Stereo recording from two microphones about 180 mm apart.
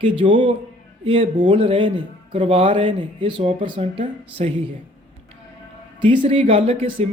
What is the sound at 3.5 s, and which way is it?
A man's voice, 25° right (ahead or behind).